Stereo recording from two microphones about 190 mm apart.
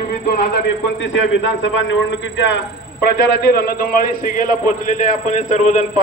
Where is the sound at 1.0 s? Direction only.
75° left (ahead or behind).